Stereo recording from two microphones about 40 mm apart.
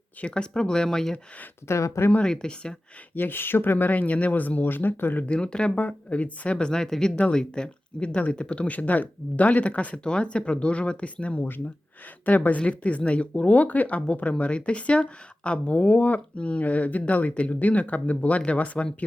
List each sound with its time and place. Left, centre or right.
0.3 s speech: left
1.7 s speech: left
2.2 s speech: centre
3.2 s speech: left
5.2 s speech: left
5.7 s speech: left
16.3 s speech: left